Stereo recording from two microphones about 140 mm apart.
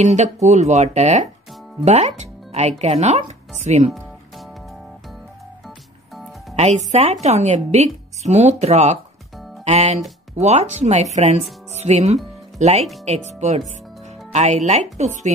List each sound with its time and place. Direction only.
0.0 s a woman's voice: 55° right (ahead or behind)
6.5 s a woman's voice: 55° right (ahead or behind)